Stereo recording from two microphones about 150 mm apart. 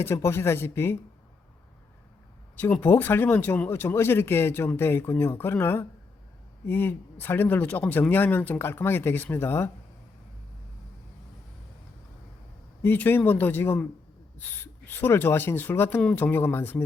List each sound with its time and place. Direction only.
0.0 s speech: 15° left (ahead or behind)
2.6 s speech: 10° left (ahead or behind)
12.8 s speech: 10° left (ahead or behind)